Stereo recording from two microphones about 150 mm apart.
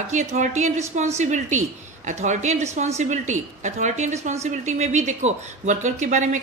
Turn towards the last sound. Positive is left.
turn(degrees=-55)  # may be behind; listen again after turning